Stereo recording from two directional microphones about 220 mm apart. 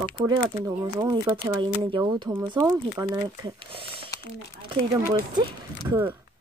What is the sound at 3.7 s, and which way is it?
Speech, 25° right (ahead or behind).